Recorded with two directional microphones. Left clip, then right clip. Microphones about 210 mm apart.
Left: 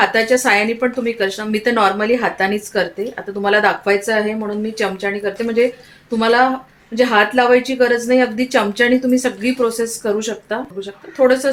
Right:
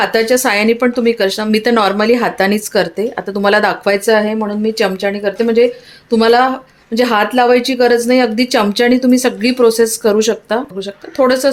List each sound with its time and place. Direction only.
0.0 s speech: 45° right (ahead or behind)